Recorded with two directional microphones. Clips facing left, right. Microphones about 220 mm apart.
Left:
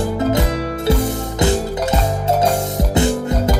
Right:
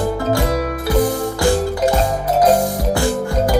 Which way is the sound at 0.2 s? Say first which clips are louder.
Even; 25° left (ahead or behind).